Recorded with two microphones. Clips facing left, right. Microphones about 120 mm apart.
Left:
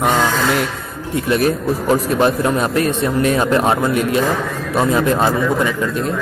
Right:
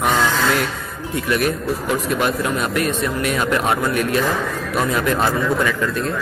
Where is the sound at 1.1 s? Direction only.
30° left (ahead or behind).